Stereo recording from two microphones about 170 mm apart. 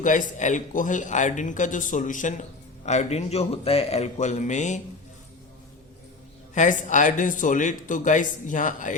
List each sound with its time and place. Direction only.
0.0 s speech: 50° left (ahead or behind)
6.5 s speech: 45° left (ahead or behind)